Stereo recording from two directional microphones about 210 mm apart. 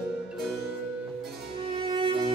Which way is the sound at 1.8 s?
25° right (ahead or behind).